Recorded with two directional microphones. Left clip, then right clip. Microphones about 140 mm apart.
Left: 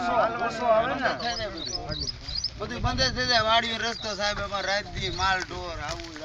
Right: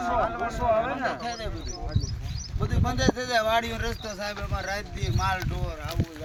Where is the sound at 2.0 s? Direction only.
85° right.